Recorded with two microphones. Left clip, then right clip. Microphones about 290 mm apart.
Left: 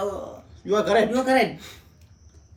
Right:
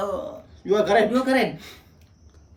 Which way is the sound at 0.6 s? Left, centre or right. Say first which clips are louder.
Right 1 dB; centre.